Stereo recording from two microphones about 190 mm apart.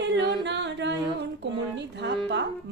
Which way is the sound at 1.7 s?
65° right (ahead or behind).